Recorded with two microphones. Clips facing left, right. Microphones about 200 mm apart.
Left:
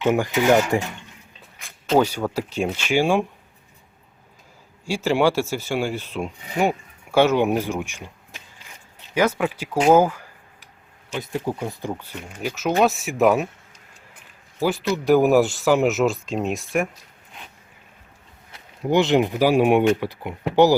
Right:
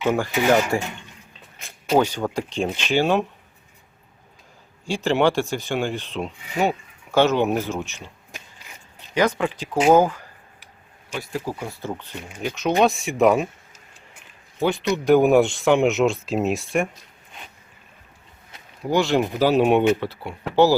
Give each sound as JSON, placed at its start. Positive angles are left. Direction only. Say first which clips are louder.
{"t": 0.0, "sound": "speech", "louder": "left 1 dB", "side_deg": 15}
{"t": 2.0, "sound": "speech", "louder": "left 1 dB", "side_deg": 10}
{"t": 4.9, "sound": "speech", "louder": "even", "side_deg": 10}
{"t": 8.3, "sound": "a sound", "louder": "right 2 dB", "side_deg": -10}
{"t": 9.1, "sound": "speech", "louder": "even", "side_deg": 10}
{"t": 11.1, "sound": "speech", "louder": "left 2 dB", "side_deg": 20}
{"t": 18.8, "sound": "speech", "louder": "left 2 dB", "side_deg": 20}